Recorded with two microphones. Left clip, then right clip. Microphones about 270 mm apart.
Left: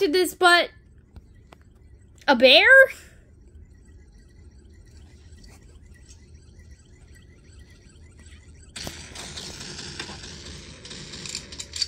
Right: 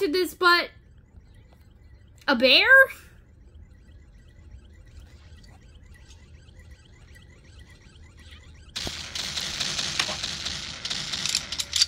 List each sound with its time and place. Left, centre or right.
0.0 s speech: centre
2.1 s a woman's voice: centre
7.7 s a sound: centre